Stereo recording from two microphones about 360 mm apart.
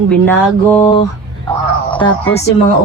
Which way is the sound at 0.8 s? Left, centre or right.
Centre.